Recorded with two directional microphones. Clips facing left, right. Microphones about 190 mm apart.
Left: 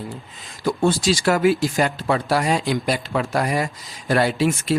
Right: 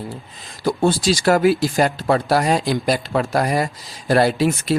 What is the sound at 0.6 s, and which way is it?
Speech, 35° right (ahead or behind).